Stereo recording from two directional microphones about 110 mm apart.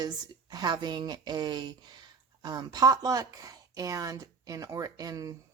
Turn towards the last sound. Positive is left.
turn(degrees=-35)  # may be behind; listen again after turning